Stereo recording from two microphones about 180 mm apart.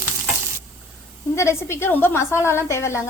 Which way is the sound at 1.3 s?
15° left (ahead or behind).